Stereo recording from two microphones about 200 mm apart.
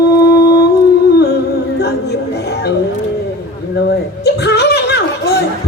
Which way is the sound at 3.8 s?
55° left (ahead or behind).